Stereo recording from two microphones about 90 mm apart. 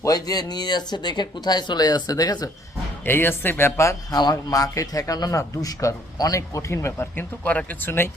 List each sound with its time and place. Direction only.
0.0 s speech: 45° left (ahead or behind)
3.0 s speech: 25° left (ahead or behind)
4.2 s speech: 45° left (ahead or behind); by 7.3 s 30° left (ahead or behind)
7.4 s speech: 15° left (ahead or behind)